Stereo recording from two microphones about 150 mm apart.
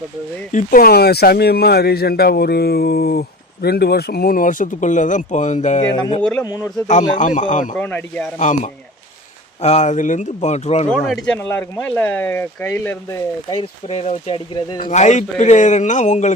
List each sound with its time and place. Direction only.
0.5 s speech: 70° left (ahead or behind); by 5.8 s 50° left (ahead or behind)
5.8 s speech: 30° left (ahead or behind)
6.8 s speech: 55° left (ahead or behind)
7.8 s speech: 10° left (ahead or behind)
8.4 s a man's voice: 55° left (ahead or behind)
10.9 s speech: centre (ahead or behind)
11.3 s speech: 15° left (ahead or behind)
13.6 s speech: 40° left (ahead or behind)
14.8 s a man's voice: 55° left (ahead or behind)